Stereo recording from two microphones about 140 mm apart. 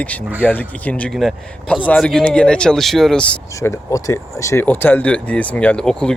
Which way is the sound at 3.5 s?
20° left (ahead or behind).